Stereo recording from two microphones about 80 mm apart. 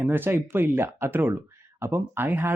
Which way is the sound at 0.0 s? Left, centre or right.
Right.